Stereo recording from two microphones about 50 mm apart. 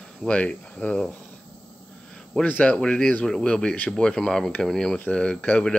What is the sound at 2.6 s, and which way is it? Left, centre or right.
Speech, centre.